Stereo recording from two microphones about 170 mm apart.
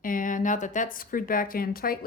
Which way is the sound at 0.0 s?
50° left (ahead or behind).